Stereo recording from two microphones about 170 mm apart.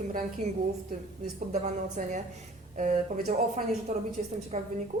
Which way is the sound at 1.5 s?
45° right (ahead or behind).